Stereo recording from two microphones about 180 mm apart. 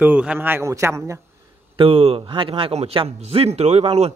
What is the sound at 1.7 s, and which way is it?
A man's voice, 30° right (ahead or behind).